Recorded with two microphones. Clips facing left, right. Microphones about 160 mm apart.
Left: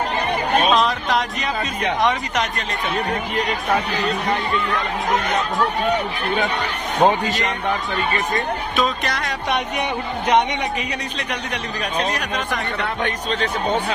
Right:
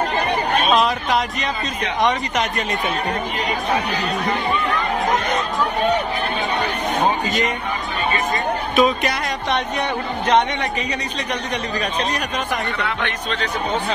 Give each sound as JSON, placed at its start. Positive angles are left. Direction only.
{"t": 0.7, "sound": "speech", "side_deg": 0}
{"t": 8.7, "sound": "speech", "side_deg": -10}
{"t": 9.5, "sound": "speech", "side_deg": 10}
{"t": 12.8, "sound": "a man's voice", "side_deg": 40}